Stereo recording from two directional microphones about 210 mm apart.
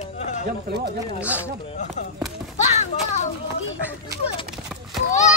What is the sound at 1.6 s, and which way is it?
Speech, 25° left (ahead or behind).